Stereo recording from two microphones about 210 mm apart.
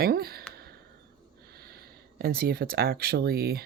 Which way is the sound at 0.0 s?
45° right (ahead or behind).